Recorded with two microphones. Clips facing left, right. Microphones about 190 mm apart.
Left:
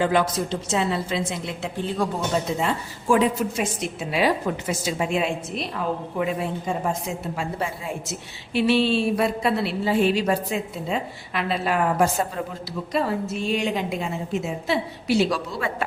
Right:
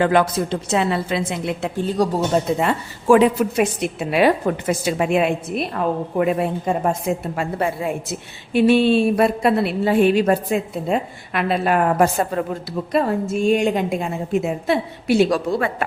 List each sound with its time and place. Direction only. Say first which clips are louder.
0.0 s a woman's voice: right 4 dB; 60° right (ahead or behind)